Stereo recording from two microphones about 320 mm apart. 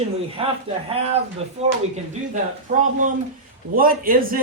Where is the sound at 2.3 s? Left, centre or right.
Right.